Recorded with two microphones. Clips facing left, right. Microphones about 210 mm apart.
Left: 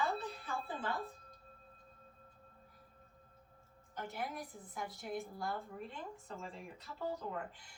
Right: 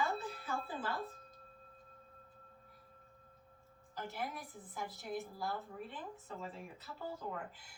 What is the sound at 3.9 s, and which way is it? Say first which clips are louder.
A woman's voice: even; centre (ahead or behind).